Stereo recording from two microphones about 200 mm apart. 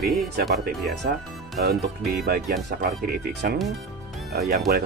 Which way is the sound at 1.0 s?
50° right (ahead or behind).